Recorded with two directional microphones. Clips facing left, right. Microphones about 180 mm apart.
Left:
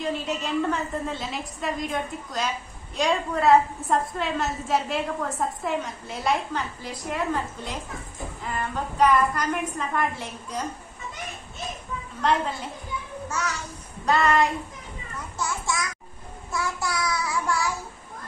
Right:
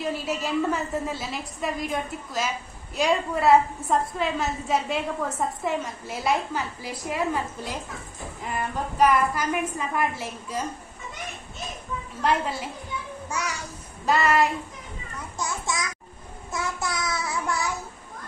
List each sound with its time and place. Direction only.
0.0 s a woman's voice: 5° right (ahead or behind)
12.2 s a woman's voice: 5° right (ahead or behind)
13.3 s child singing: 10° right (ahead or behind)
15.3 s child singing: 20° right (ahead or behind)